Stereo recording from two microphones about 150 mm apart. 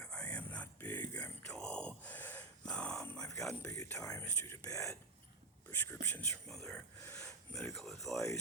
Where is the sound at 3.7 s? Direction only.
20° left (ahead or behind).